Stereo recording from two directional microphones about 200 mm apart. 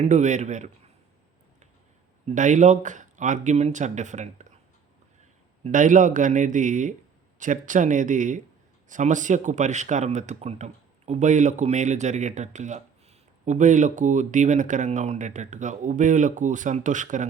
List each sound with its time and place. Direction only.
0.0 s speech: 35° right (ahead or behind)
2.2 s speech: 40° right (ahead or behind)
5.6 s speech: 40° right (ahead or behind)